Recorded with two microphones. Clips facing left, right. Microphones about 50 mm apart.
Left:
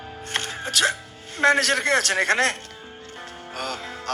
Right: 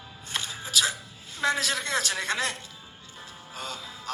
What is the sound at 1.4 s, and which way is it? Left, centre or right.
A man's voice, left.